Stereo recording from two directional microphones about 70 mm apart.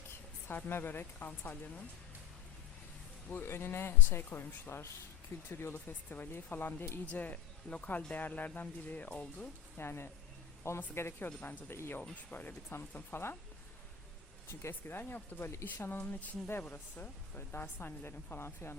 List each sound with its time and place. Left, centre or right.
0.1 s speech: left
3.4 s speech: left
7.0 s speech: left
9.7 s speech: left
14.7 s speech: left